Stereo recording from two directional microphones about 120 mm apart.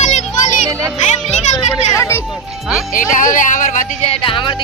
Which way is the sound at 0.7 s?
25° right (ahead or behind).